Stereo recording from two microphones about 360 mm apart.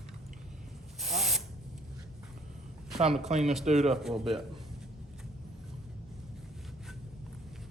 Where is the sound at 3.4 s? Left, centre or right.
Centre.